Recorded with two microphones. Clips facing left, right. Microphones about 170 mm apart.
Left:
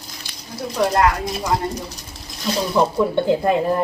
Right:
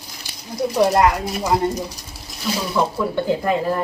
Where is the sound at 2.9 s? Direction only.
20° left (ahead or behind).